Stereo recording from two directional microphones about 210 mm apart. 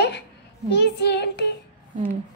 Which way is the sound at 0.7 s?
55° left (ahead or behind).